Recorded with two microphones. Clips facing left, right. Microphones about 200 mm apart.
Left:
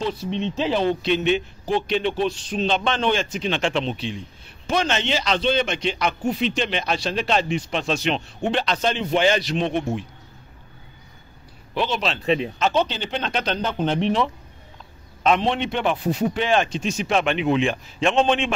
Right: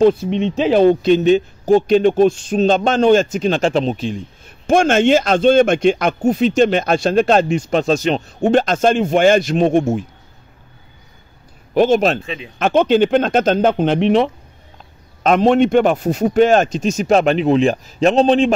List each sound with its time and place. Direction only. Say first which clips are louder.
0.0 s a man's voice: right 12 dB; 50° right (ahead or behind)
11.7 s a man's voice: right 11 dB; 45° right (ahead or behind)
12.2 s speech: left 7 dB; 35° left (ahead or behind)
12.5 s a man's voice: right 9 dB; 55° right (ahead or behind); by 14.3 s 70° right (ahead or behind)
15.2 s a man's voice: right 8 dB; 45° right (ahead or behind)